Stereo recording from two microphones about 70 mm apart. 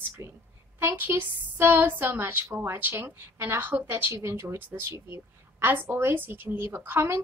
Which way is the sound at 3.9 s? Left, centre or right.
Right.